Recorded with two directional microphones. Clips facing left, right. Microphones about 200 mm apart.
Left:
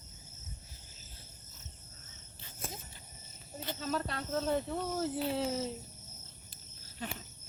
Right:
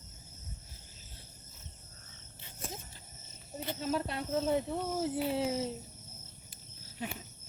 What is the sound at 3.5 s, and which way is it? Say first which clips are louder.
Snake: right 2 dB; 15° right (ahead or behind).